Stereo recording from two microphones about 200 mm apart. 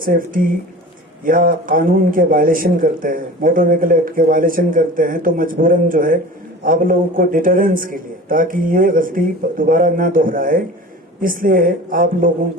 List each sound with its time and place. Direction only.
1.2 s speech: 45° right (ahead or behind)